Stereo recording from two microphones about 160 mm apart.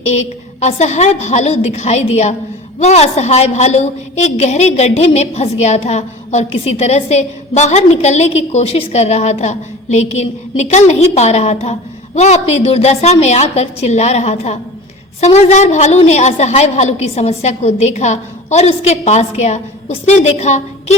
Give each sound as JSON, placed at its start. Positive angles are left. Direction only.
{"t": 0.0, "sound": "a woman's voice", "side_deg": 45}